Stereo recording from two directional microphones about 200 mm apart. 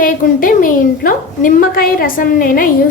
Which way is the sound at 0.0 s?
45° left (ahead or behind).